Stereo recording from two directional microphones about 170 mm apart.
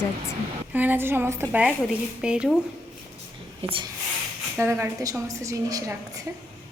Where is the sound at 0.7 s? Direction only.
10° right (ahead or behind).